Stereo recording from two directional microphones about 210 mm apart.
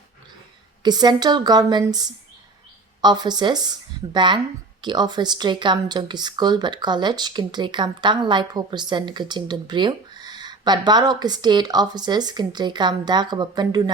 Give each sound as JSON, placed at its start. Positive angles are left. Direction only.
{"t": 0.8, "sound": "speech", "side_deg": -20}